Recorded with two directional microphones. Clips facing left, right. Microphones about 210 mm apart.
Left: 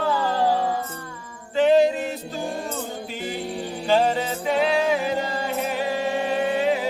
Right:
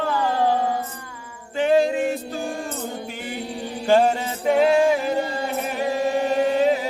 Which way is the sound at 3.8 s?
50° right (ahead or behind).